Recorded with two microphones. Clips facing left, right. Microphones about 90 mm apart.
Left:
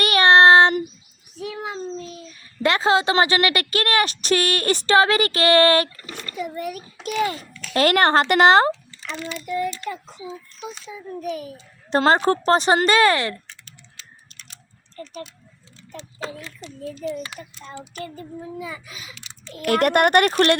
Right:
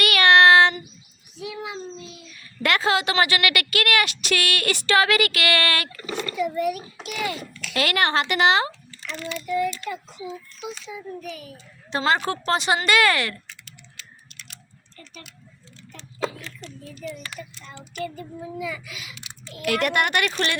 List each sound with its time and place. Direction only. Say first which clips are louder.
0.0 s child singing: left 2 dB; 30° left (ahead or behind)
1.4 s child singing: left 3 dB; 40° left (ahead or behind)
2.3 s a woman's voice: left 2 dB; 25° left (ahead or behind)
5.9 s speech: right 7 dB; 90° right
6.3 s a woman's voice: right 4 dB; 40° left (ahead or behind)
9.3 s a child's voice: right 2 dB; 5° left (ahead or behind)
9.6 s a child's voice: even; 25° left (ahead or behind)
10.8 s a woman's voice: left 1 dB; 40° left (ahead or behind)
12.1 s a woman's voice: left 6 dB; 35° left (ahead or behind)
14.3 s a sound: right 2 dB; 35° left (ahead or behind)
16.9 s a child's voice: left 6 dB; 30° left (ahead or behind)
17.5 s a woman's voice: left 4 dB; 40° left (ahead or behind)